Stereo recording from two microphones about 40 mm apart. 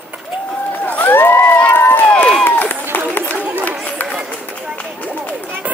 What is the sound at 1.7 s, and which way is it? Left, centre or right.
Run, left.